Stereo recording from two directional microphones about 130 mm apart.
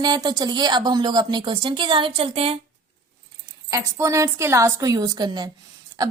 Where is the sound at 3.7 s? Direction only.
20° right (ahead or behind).